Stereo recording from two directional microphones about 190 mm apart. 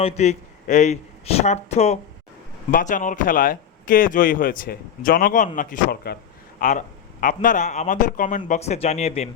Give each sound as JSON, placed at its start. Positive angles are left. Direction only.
{"t": 0.0, "sound": "speech", "side_deg": 35}
{"t": 6.6, "sound": "a man's voice", "side_deg": 45}